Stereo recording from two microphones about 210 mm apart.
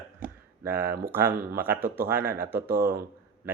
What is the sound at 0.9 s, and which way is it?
Speech, 45° right (ahead or behind).